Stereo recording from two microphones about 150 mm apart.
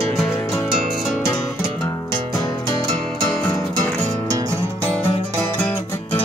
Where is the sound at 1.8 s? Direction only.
25° left (ahead or behind).